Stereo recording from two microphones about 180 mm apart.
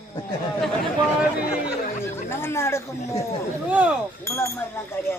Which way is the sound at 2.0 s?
15° left (ahead or behind).